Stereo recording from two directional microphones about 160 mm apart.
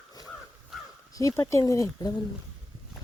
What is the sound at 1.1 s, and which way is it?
Speech, 20° left (ahead or behind).